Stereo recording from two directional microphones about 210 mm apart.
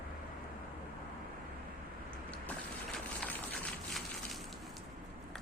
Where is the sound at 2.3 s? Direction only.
5° left (ahead or behind).